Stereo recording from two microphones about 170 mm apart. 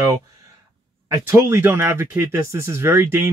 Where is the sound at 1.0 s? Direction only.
15° right (ahead or behind).